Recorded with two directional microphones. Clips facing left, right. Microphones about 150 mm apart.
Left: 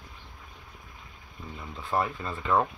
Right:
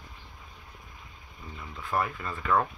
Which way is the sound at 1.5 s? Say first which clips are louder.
Left 1 dB; 25° left (ahead or behind).